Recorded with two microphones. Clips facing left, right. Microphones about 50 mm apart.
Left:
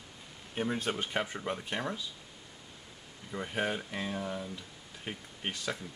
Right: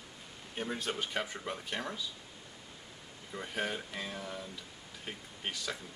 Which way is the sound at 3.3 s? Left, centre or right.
Centre.